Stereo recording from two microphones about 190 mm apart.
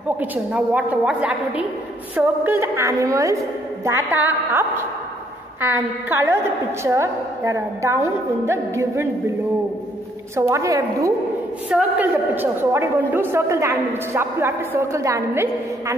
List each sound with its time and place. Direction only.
0.2 s a man's voice: 10° right (ahead or behind)
10.3 s a man's voice: 15° right (ahead or behind)